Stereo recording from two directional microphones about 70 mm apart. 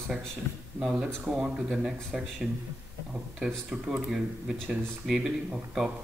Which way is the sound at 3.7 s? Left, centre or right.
Centre.